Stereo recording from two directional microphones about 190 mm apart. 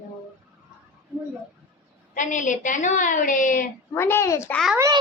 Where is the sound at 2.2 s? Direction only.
40° left (ahead or behind).